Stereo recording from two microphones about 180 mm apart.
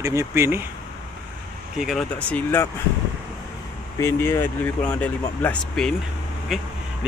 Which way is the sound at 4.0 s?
15° left (ahead or behind).